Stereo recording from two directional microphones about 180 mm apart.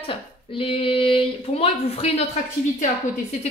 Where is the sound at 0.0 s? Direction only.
30° left (ahead or behind).